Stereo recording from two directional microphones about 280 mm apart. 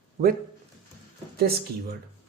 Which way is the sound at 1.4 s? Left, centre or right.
Right.